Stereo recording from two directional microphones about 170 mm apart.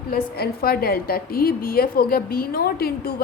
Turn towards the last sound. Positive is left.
turn(degrees=65)  # may be behind; listen again after turning